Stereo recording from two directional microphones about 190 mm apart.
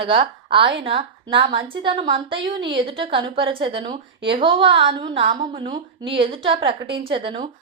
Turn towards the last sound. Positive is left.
turn(degrees=-30)  # may be behind; listen again after turning